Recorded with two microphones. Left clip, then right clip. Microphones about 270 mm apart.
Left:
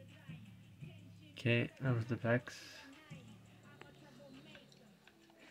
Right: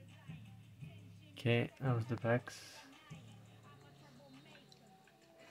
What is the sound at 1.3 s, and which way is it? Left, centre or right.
Music, centre.